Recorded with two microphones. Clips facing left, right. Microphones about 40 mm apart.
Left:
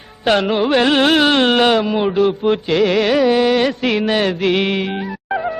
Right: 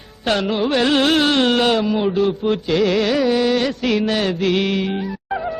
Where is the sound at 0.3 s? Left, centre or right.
Left.